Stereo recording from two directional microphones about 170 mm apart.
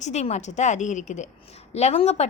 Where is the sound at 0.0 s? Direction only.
40° left (ahead or behind).